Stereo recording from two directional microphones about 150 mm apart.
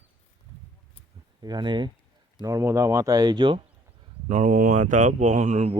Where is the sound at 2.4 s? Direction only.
20° right (ahead or behind).